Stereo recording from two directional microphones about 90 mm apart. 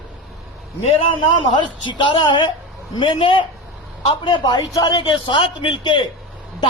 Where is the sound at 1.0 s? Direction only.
70° left (ahead or behind).